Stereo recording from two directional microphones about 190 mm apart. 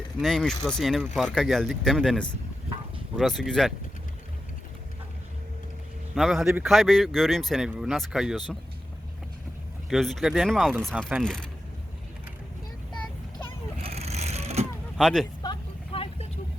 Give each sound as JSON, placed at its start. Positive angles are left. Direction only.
{"t": 0.2, "sound": "speech", "side_deg": 0}
{"t": 6.1, "sound": "speech", "side_deg": 0}
{"t": 9.9, "sound": "speech", "side_deg": 0}
{"t": 13.8, "sound": "vehicle", "side_deg": -35}
{"t": 14.9, "sound": "speech", "side_deg": 0}
{"t": 15.4, "sound": "vehicle", "side_deg": 30}